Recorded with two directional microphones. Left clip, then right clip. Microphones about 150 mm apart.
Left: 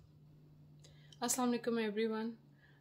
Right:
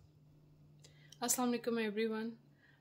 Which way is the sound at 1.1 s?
10° right (ahead or behind).